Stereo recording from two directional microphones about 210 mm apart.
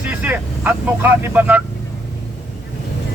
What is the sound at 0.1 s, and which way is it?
Speech, 5° right (ahead or behind).